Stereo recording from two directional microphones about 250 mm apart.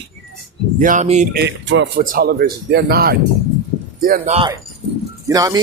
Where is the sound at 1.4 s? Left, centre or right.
Right.